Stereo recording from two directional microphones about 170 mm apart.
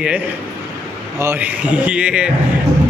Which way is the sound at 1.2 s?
10° right (ahead or behind).